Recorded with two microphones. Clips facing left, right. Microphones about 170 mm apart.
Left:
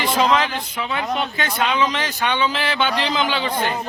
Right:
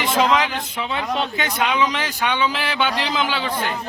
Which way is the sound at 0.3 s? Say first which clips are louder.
Even; 15° right (ahead or behind).